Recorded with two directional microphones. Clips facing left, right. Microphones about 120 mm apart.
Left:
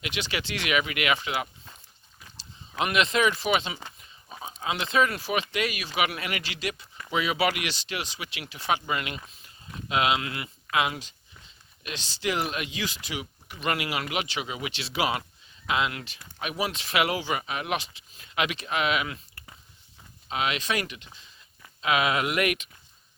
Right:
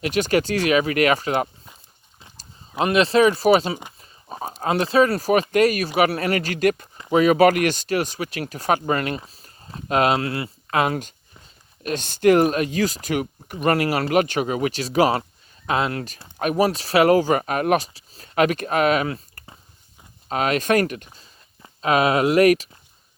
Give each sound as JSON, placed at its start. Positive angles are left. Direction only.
{"t": 0.0, "sound": "speech", "side_deg": -45}